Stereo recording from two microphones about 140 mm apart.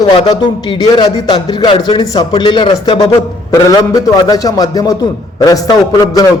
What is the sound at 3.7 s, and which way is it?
A man's voice, 25° left (ahead or behind).